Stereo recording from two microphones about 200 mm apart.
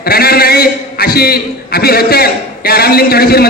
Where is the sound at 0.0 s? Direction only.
50° left (ahead or behind).